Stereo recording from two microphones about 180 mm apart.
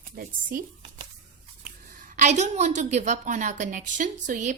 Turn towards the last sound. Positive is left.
turn(degrees=-45)  # may be behind; listen again after turning